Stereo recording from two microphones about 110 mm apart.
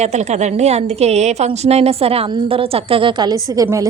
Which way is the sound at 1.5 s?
70° right (ahead or behind).